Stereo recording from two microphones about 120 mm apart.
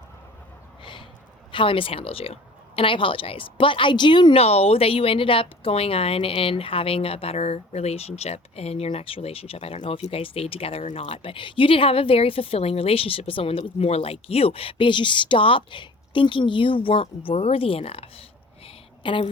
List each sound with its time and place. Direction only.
0.8 s a sound: 40° left (ahead or behind)
1.5 s a woman's voice: 45° left (ahead or behind)
4.4 s a woman's voice: 60° left (ahead or behind)
11.1 s a woman's voice: 50° left (ahead or behind)